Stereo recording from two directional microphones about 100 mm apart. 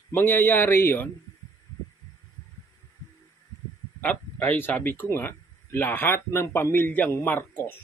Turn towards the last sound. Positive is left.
turn(degrees=25)  # may be behind; listen again after turning